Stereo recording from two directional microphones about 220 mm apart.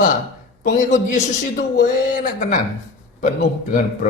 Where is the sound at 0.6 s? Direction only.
35° left (ahead or behind).